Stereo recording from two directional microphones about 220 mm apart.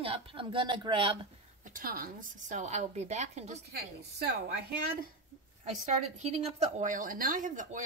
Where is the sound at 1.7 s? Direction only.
40° right (ahead or behind).